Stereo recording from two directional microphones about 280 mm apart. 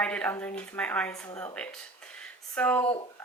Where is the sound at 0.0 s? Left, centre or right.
Centre.